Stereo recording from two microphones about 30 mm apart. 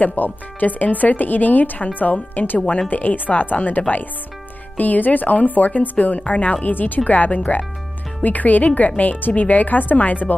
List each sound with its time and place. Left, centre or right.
0.0 s speech: left
2.3 s speech: left
2.9 s speech: left
4.7 s speech: left
6.6 s speech: left
7.1 s speech: left